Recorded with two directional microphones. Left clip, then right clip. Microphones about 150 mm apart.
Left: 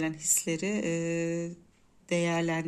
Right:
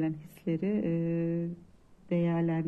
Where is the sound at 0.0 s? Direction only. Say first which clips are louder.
Left 4 dB; 20° left (ahead or behind).